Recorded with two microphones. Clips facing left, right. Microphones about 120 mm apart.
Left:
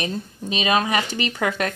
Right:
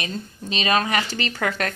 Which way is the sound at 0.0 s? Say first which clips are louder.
Left 3 dB; 15° left (ahead or behind).